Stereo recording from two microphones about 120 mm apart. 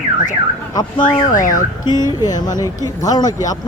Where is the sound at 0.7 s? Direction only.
35° left (ahead or behind).